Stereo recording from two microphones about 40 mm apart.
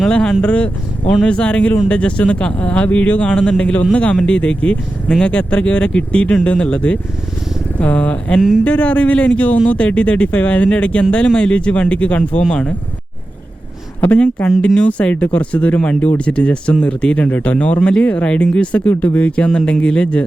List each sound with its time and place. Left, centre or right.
0.1 s speech: left
14.8 s speech: left
17.2 s speech: left
18.9 s speech: left
19.5 s speech: left